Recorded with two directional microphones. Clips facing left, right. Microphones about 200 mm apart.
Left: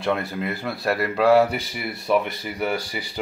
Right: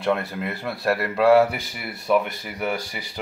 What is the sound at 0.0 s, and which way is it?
Speech, centre (ahead or behind).